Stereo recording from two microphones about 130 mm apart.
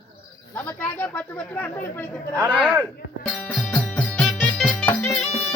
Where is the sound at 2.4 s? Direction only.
10° right (ahead or behind).